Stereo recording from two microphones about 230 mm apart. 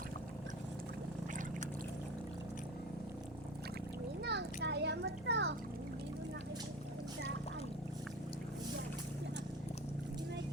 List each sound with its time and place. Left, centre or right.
4.2 s children playing: right